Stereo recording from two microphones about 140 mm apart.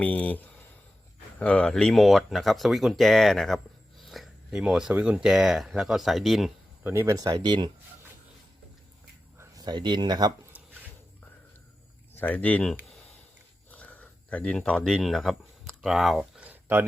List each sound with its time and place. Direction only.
0.0 s speech: 10° left (ahead or behind)
6.8 s speech: 15° right (ahead or behind)
9.4 s speech: 30° right (ahead or behind)
12.1 s speech: 10° left (ahead or behind)
13.7 s a sound: 10° left (ahead or behind); by 16.8 s 15° right (ahead or behind)